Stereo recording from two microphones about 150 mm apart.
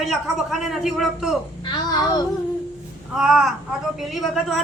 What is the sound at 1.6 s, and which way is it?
Speech, 30° left (ahead or behind).